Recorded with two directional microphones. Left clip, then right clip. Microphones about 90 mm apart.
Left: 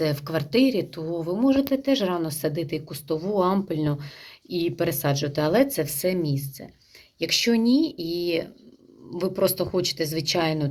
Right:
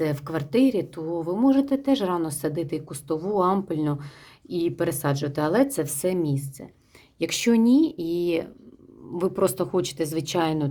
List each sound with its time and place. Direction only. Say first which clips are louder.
0.0 s speech: left 1 dB; 30° right (ahead or behind); by 6.7 s 45° right (ahead or behind)
7.2 s a woman's voice: even; 55° right (ahead or behind); by 10.7 s 35° right (ahead or behind)